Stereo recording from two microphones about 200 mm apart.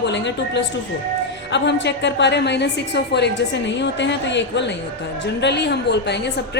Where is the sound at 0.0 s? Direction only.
60° left (ahead or behind).